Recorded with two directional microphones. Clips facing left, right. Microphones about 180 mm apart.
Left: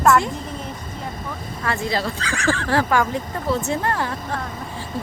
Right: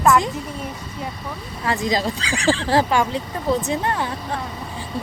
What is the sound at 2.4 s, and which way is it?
Speech, 30° right (ahead or behind).